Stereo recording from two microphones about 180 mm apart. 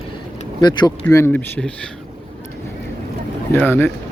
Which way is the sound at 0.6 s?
25° left (ahead or behind).